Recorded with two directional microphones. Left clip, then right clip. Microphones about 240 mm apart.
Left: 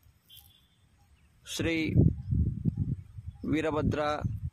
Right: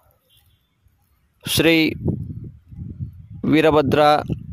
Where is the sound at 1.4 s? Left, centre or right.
Right.